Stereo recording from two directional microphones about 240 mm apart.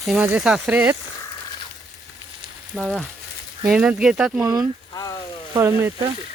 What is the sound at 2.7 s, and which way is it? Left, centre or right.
Speech, centre.